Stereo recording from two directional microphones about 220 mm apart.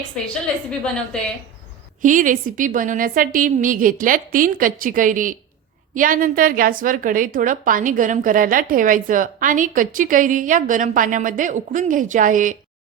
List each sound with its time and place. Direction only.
0.2 s a woman's voice: 5° left (ahead or behind)
2.0 s a woman's voice: 35° right (ahead or behind)